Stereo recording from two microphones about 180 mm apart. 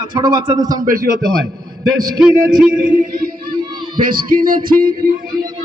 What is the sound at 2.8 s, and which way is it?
Music, 55° right (ahead or behind).